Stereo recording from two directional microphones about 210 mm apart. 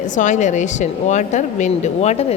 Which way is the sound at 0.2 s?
35° left (ahead or behind).